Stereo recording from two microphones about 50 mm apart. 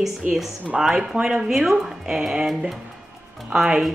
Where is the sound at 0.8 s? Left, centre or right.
Centre.